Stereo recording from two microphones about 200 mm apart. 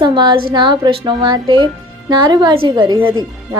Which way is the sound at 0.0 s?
20° right (ahead or behind).